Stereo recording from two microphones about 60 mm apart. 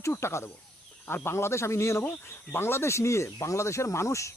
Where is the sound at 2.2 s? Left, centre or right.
Left.